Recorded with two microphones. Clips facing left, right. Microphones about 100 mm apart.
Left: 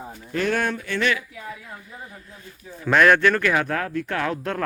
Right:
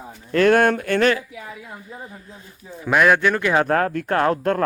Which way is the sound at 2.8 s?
10° right (ahead or behind).